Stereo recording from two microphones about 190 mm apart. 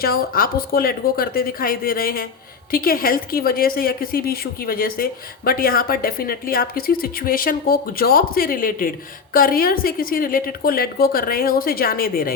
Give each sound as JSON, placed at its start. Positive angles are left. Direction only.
{"t": 0.0, "sound": "speech", "side_deg": 50}